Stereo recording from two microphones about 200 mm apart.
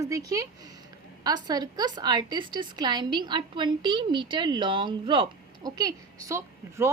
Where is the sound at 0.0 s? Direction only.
15° right (ahead or behind).